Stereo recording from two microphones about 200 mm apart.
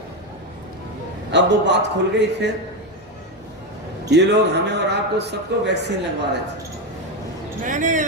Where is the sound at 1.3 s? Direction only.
60° right (ahead or behind).